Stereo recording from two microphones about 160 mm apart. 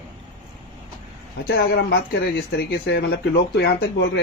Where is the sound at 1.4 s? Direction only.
85° left.